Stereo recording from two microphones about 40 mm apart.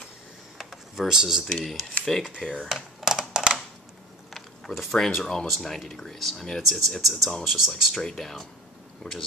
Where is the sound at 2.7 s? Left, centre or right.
Centre.